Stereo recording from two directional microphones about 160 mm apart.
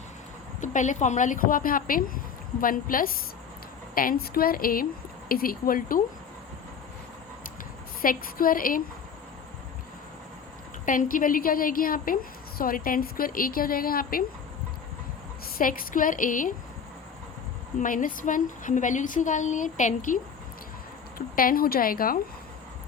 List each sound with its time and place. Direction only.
0.6 s a woman's voice: 50° left (ahead or behind)
8.0 s a woman's voice: 60° left (ahead or behind)
10.8 s a woman's voice: 55° left (ahead or behind)
15.5 s a woman's voice: 60° left (ahead or behind)
17.7 s speech: 55° left (ahead or behind)
21.2 s a woman's voice: 65° left (ahead or behind)